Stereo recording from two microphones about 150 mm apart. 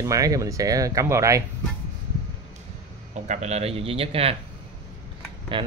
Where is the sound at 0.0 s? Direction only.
20° right (ahead or behind).